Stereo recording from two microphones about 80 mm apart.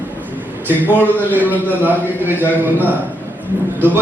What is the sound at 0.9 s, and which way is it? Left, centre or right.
Speech, right.